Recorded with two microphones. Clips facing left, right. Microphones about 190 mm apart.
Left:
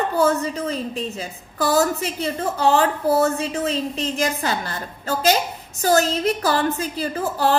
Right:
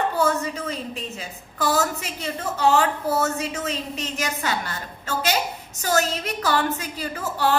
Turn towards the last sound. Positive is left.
turn(degrees=35)  # may be behind; listen again after turning